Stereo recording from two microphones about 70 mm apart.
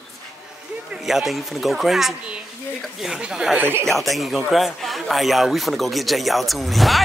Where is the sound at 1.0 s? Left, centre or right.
Centre.